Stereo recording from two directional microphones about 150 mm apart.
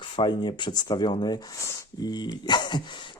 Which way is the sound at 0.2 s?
30° left (ahead or behind).